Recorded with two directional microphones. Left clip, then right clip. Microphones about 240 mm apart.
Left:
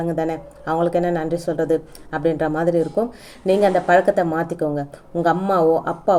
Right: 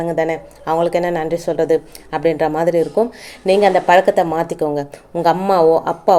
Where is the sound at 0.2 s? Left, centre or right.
Centre.